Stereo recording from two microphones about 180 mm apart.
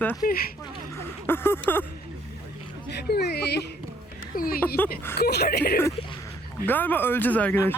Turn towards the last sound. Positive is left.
turn(degrees=10)  # may be behind; listen again after turning